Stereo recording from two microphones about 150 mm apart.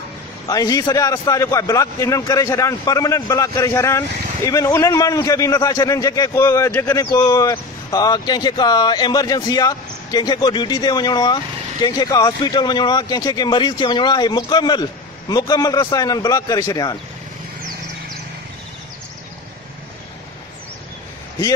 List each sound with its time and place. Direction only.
0.5 s a man's voice: 25° left (ahead or behind)